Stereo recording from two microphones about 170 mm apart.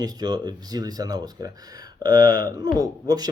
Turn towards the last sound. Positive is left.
turn(degrees=-20)  # may be behind; listen again after turning